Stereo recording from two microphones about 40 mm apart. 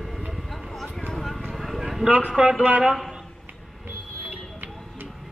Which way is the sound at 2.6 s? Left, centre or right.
Right.